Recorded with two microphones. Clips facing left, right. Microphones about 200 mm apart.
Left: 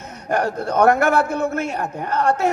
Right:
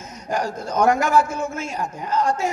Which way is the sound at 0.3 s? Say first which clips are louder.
Left 4 dB; 60° left (ahead or behind).